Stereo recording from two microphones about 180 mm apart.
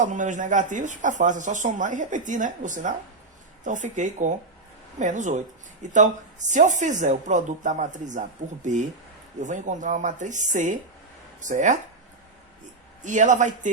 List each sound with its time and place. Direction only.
0.0 s speech: 45° right (ahead or behind)
13.0 s speech: 45° right (ahead or behind)